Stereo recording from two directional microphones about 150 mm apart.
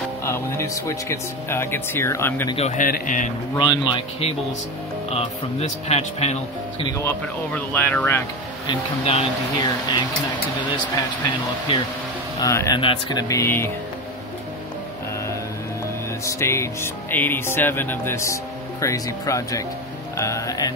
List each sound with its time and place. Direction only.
0.2 s music: 20° left (ahead or behind)
2.5 s speech: 45° left (ahead or behind)
2.8 s speech: 60° left (ahead or behind)
3.5 s speech: 30° left (ahead or behind)
5.1 s speech: 45° left (ahead or behind)
7.1 s music: 10° left (ahead or behind)
9.0 s speech: 40° left (ahead or behind)
12.4 s speech: 20° left (ahead or behind)
12.8 s speech: 35° left (ahead or behind)
13.3 s speech: 20° left (ahead or behind)
16.3 s music: 20° left (ahead or behind)
20.2 s speech: 20° left (ahead or behind)